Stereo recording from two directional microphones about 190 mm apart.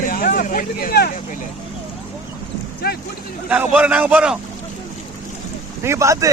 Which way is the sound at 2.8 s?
55° left (ahead or behind).